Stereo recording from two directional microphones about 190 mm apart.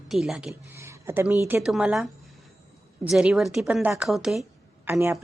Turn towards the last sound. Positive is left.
turn(degrees=0)  # may be behind; listen again after turning